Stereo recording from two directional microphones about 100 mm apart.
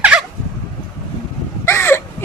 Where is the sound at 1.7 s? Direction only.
25° left (ahead or behind).